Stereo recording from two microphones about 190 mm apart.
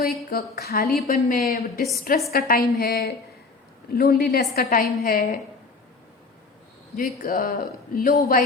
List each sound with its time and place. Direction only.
0.3 s a woman's voice: 50° left (ahead or behind)
6.9 s a woman's voice: 45° left (ahead or behind)